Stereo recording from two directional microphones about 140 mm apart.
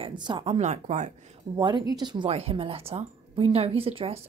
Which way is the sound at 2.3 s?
45° right (ahead or behind).